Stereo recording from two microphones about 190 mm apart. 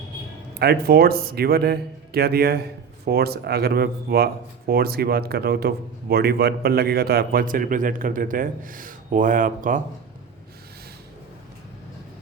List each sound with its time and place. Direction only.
0.6 s speech: 55° right (ahead or behind)